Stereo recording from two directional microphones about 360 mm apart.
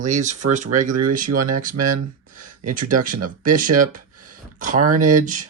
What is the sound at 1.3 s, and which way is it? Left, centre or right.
Speech, right.